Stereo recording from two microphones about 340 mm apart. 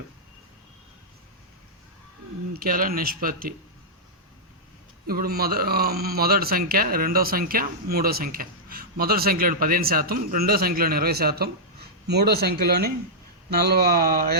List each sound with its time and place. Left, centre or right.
2.5 s speech: right
5.0 s speech: right